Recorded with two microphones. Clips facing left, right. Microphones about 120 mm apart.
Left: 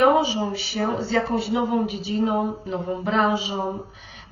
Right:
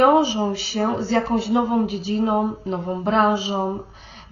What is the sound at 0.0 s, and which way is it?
Speech, 35° right (ahead or behind).